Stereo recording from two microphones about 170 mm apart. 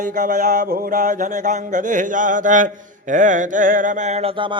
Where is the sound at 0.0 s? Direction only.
50° right (ahead or behind).